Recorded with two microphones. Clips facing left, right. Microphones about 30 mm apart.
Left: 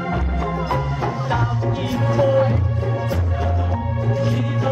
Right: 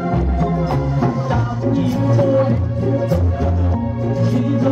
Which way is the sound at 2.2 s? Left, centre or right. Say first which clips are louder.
Even; left.